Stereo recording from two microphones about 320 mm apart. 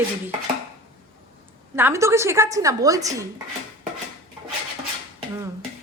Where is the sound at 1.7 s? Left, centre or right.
Centre.